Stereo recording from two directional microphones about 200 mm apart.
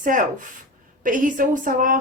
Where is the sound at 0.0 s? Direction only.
40° right (ahead or behind).